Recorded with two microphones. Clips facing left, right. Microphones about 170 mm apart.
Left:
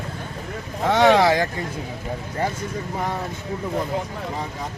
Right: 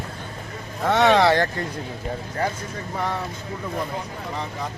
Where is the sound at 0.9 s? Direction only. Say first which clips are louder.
Left 1 dB; centre (ahead or behind).